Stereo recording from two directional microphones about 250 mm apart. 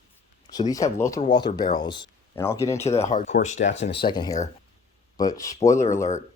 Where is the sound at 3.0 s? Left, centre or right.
Left.